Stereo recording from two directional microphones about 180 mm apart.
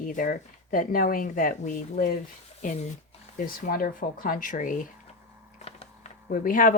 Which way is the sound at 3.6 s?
50° left (ahead or behind).